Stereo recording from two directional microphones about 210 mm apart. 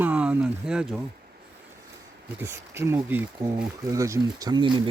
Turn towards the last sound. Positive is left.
turn(degrees=-20)  # may be behind; listen again after turning